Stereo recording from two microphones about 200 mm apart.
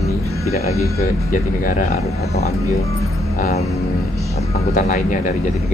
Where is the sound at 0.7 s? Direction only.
15° left (ahead or behind).